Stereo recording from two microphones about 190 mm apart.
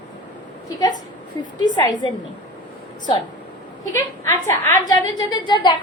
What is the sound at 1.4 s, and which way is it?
Speech, 25° left (ahead or behind).